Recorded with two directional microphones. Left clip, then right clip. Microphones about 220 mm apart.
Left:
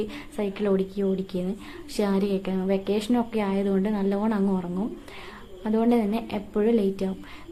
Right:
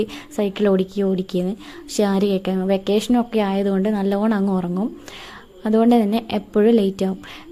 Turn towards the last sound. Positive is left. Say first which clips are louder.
# right 7 dB
turn(degrees=-35)  # may be behind; listen again after turning